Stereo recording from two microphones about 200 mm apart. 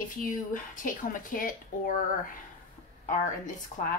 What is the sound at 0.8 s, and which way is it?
Speech, 45° left (ahead or behind).